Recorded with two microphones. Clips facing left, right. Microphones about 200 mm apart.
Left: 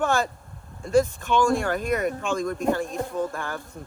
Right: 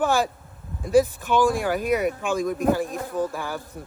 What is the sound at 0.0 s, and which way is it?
Speech, centre (ahead or behind).